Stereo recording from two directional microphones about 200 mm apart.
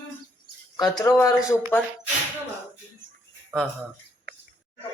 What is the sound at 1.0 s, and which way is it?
Speech, 15° left (ahead or behind).